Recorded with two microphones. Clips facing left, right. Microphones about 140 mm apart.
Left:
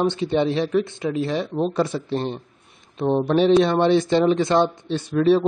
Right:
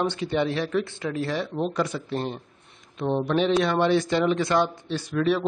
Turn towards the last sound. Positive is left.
turn(degrees=30)  # may be behind; listen again after turning